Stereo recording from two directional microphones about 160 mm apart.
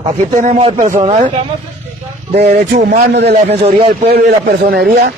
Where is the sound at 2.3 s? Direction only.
40° right (ahead or behind).